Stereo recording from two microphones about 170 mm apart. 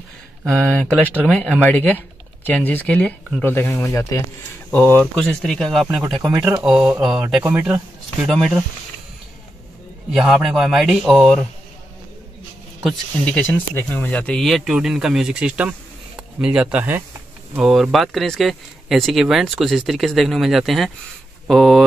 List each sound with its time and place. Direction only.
0.5 s speech: 5° left (ahead or behind)
8.3 s speech: centre (ahead or behind)
10.1 s speech: centre (ahead or behind)
12.8 s speech: 5° left (ahead or behind)